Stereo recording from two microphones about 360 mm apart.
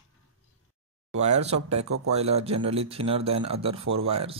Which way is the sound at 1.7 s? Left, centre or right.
Right.